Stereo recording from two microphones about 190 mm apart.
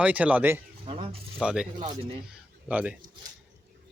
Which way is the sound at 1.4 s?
5° right (ahead or behind).